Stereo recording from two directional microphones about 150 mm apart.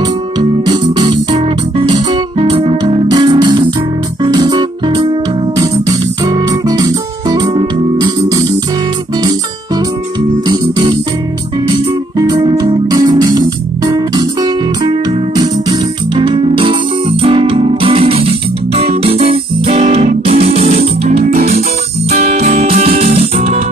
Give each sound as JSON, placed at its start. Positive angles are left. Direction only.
{"t": 0.4, "sound": "music", "side_deg": -30}
{"t": 10.4, "sound": "music", "side_deg": -30}
{"t": 22.1, "sound": "music", "side_deg": -60}